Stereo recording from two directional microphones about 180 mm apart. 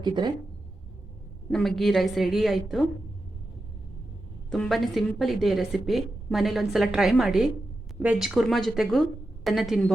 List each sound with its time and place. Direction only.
0.0 s speech: 25° right (ahead or behind)
1.5 s a woman's voice: centre (ahead or behind)
4.5 s a woman's voice: centre (ahead or behind)